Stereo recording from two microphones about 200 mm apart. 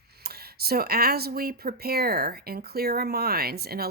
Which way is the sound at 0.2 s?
50° right (ahead or behind).